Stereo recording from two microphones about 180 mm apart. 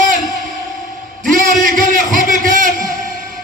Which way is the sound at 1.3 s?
50° right (ahead or behind).